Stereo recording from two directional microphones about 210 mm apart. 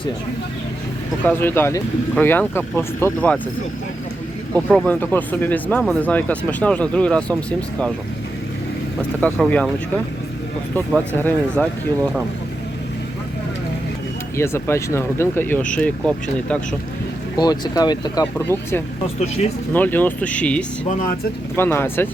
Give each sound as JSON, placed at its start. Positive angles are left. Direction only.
{"t": 1.2, "sound": "speech", "side_deg": 10}
{"t": 4.5, "sound": "speech", "side_deg": 5}
{"t": 9.0, "sound": "speech", "side_deg": 5}
{"t": 10.8, "sound": "speech", "side_deg": 10}
{"t": 14.3, "sound": "speech", "side_deg": 10}
{"t": 17.3, "sound": "speech", "side_deg": 20}